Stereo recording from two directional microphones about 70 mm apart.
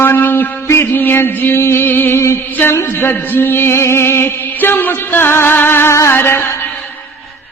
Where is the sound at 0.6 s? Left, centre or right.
Left.